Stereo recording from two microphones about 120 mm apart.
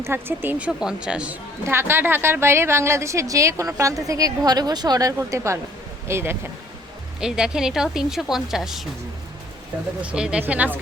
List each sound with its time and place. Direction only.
0.0 s speech: 20° right (ahead or behind)
0.8 s speech: 5° right (ahead or behind)
1.6 s a woman's voice: 20° right (ahead or behind)
7.2 s a woman's voice: 5° right (ahead or behind)
10.0 s speech: 10° right (ahead or behind)